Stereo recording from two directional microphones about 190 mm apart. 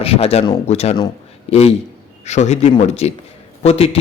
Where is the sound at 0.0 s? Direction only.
30° left (ahead or behind).